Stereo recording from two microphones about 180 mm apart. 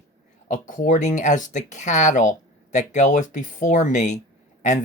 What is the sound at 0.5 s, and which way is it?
Speech, 45° left (ahead or behind).